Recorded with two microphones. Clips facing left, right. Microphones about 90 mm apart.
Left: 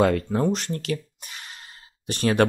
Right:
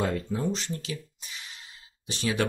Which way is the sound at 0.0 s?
70° left (ahead or behind).